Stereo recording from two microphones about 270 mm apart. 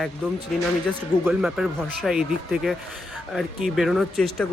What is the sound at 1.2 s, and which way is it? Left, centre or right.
Speech, centre.